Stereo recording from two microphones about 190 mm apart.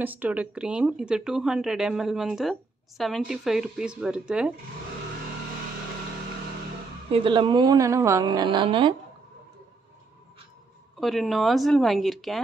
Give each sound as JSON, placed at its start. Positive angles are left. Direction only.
{"t": 0.0, "sound": "speech", "side_deg": -10}
{"t": 7.1, "sound": "a woman's voice", "side_deg": -25}
{"t": 11.0, "sound": "speech", "side_deg": 0}